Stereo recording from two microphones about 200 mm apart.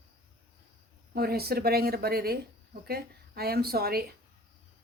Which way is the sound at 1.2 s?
50° right (ahead or behind).